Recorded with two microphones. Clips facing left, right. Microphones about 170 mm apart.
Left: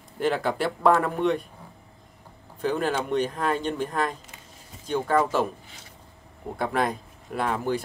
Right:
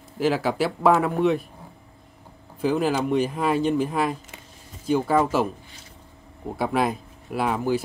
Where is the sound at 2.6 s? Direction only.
5° right (ahead or behind).